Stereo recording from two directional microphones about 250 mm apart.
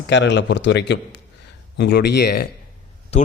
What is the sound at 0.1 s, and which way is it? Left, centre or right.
Speech, left.